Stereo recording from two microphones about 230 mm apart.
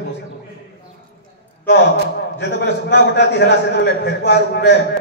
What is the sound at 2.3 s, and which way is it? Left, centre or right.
A man's voice, left.